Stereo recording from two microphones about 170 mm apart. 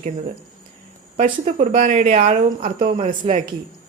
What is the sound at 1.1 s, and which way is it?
A woman's voice, 45° right (ahead or behind).